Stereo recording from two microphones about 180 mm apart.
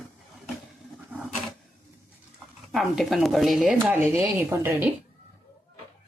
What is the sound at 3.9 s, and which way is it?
Speech, 10° right (ahead or behind).